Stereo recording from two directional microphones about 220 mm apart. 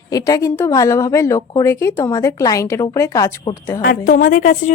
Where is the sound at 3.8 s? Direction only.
40° left (ahead or behind).